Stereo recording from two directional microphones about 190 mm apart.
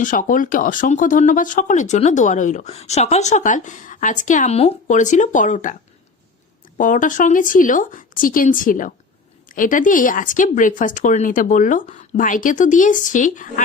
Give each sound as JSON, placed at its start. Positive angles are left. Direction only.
{"t": 0.0, "sound": "speech", "side_deg": 45}
{"t": 6.7, "sound": "speech", "side_deg": 45}